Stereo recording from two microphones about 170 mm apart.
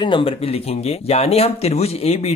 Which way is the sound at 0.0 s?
30° left (ahead or behind).